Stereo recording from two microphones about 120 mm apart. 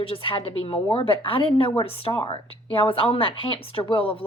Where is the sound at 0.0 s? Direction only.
50° left (ahead or behind).